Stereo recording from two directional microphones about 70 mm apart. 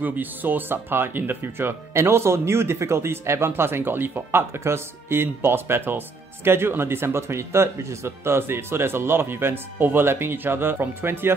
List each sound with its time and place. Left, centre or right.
0.0 s speech: right